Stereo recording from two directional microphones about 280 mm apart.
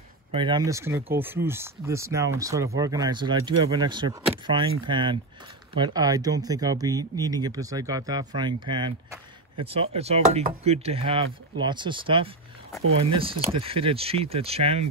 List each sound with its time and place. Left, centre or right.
0.3 s speech: centre